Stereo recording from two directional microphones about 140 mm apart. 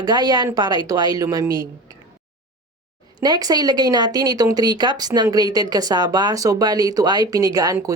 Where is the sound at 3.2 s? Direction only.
30° right (ahead or behind).